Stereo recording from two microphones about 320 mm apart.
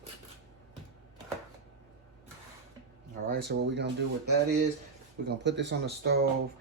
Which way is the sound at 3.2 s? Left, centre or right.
Right.